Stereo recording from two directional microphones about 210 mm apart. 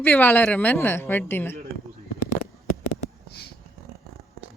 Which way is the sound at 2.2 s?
40° left (ahead or behind).